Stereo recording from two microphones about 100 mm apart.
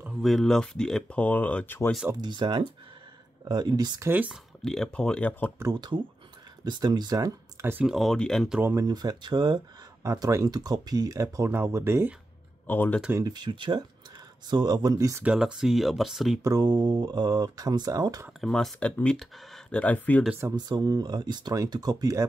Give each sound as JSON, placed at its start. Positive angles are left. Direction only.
{"t": 0.2, "sound": "speech", "side_deg": 0}
{"t": 2.2, "sound": "speech", "side_deg": -50}
{"t": 4.6, "sound": "speech", "side_deg": 5}
{"t": 5.7, "sound": "speech", "side_deg": -50}
{"t": 7.8, "sound": "speech", "side_deg": 0}
{"t": 8.6, "sound": "speech", "side_deg": -35}
{"t": 12.6, "sound": "speech", "side_deg": 20}
{"t": 13.2, "sound": "speech", "side_deg": -45}
{"t": 15.2, "sound": "speech", "side_deg": -5}
{"t": 16.4, "sound": "speech", "side_deg": -40}
{"t": 18.4, "sound": "speech", "side_deg": 5}
{"t": 20.5, "sound": "speech", "side_deg": -45}